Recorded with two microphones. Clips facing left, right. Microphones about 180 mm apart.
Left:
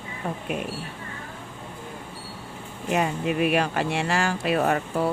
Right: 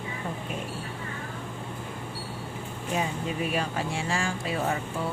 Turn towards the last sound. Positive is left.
turn(degrees=65)  # may be behind; listen again after turning